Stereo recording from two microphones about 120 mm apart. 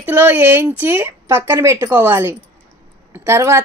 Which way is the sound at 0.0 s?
15° right (ahead or behind).